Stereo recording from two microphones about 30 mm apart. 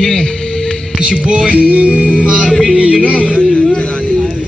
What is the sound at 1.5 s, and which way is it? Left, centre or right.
Music, right.